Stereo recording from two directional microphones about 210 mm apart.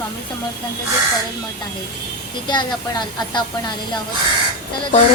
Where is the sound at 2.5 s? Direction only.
20° left (ahead or behind).